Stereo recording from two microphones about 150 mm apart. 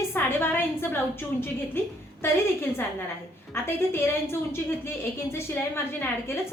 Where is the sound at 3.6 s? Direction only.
15° left (ahead or behind).